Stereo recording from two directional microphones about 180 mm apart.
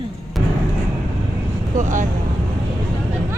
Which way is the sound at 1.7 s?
45° right (ahead or behind).